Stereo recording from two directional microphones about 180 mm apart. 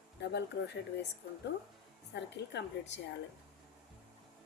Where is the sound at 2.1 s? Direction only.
75° left (ahead or behind).